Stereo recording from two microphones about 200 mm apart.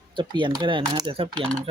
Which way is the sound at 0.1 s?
25° right (ahead or behind).